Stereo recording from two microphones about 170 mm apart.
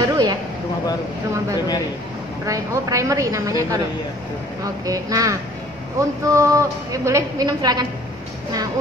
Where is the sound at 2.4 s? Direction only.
20° right (ahead or behind).